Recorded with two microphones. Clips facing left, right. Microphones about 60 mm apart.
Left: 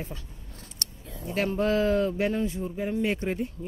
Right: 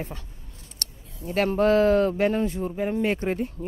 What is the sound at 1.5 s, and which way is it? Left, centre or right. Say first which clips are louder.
Speech: right 5 dB; right.